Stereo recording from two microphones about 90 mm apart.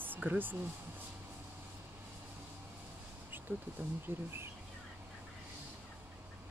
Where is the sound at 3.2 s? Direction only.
20° right (ahead or behind).